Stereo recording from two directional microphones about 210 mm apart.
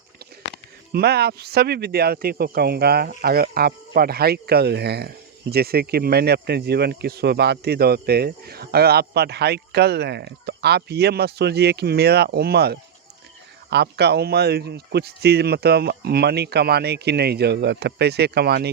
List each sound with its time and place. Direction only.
0.9 s speech: 50° right (ahead or behind)